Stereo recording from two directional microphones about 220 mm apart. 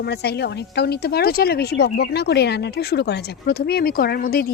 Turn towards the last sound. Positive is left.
turn(degrees=45)  # may be behind; listen again after turning